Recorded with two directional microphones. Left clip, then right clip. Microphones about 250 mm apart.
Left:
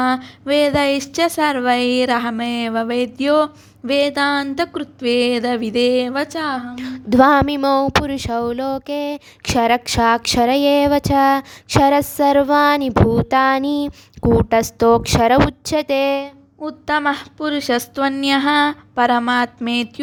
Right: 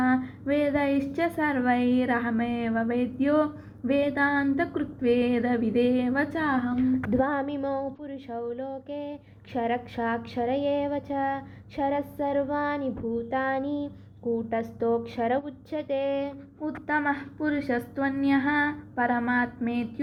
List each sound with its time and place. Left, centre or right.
0.0 s speech: left